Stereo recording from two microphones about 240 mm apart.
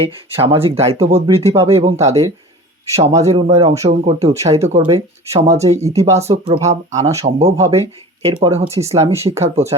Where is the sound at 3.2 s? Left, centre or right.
Right.